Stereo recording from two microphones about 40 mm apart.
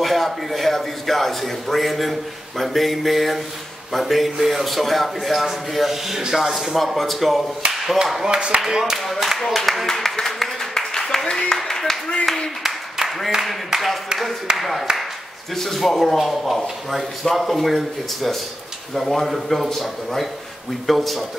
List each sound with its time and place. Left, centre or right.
0.0 s a man's voice: centre
8.2 s speech: right
8.5 s speech: centre
9.0 s a man's voice: centre
9.8 s a sound: centre
11.5 s speech: centre
12.6 s a sound: centre
13.3 s a man's voice: centre